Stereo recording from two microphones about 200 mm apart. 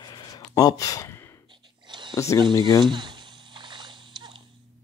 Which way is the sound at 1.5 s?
25° right (ahead or behind).